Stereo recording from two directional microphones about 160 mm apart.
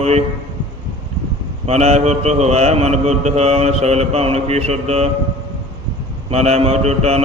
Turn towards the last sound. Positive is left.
turn(degrees=-40)  # may be behind; listen again after turning